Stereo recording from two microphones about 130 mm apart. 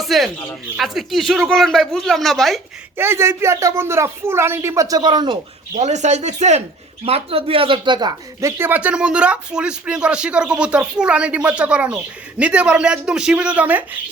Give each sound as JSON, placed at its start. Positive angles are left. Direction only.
{"t": 0.0, "sound": "speech", "side_deg": 0}
{"t": 3.0, "sound": "speech", "side_deg": -20}
{"t": 5.8, "sound": "speech", "side_deg": -65}
{"t": 7.0, "sound": "speech", "side_deg": -50}
{"t": 8.4, "sound": "speech", "side_deg": -20}